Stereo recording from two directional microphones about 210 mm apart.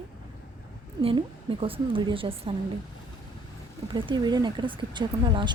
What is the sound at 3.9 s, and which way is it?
A woman's voice, 20° right (ahead or behind).